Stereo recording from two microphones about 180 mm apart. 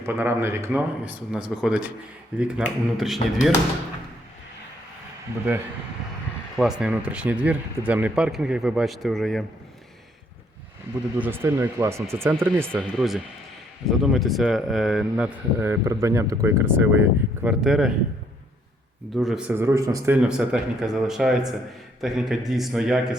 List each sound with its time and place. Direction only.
0.0 s speech: 15° right (ahead or behind)
6.6 s speech: 5° right (ahead or behind)
11.2 s speech: 10° right (ahead or behind)
19.1 s speech: centre (ahead or behind)
19.5 s speech: 15° right (ahead or behind)
20.1 s speech: 5° right (ahead or behind)